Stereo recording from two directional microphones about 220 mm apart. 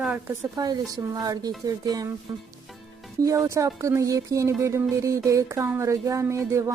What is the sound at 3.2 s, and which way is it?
Speech, 15° right (ahead or behind).